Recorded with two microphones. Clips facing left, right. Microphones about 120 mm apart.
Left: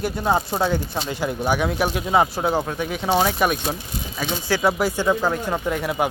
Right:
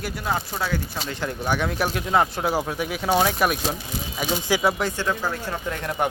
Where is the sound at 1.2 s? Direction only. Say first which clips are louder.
Left 3 dB; 5° left (ahead or behind).